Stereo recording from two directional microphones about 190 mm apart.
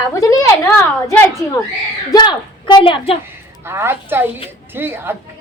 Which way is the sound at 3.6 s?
10° right (ahead or behind).